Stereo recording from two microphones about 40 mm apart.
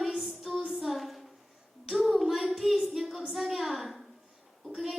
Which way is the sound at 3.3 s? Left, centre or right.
Centre.